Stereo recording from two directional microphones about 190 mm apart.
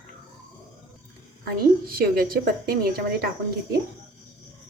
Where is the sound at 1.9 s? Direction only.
50° right (ahead or behind).